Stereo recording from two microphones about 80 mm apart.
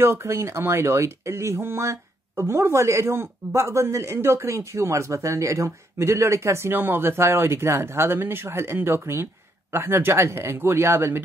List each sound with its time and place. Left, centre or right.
0.0 s speech: right